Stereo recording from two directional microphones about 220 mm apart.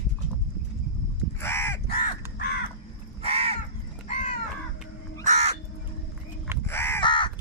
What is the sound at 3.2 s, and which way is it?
Crow, 25° right (ahead or behind).